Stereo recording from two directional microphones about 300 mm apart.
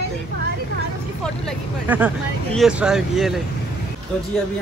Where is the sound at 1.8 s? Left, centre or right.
Centre.